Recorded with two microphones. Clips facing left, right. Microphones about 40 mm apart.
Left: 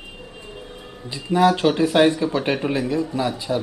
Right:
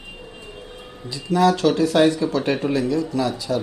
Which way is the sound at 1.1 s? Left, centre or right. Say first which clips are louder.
Left 1 dB; left.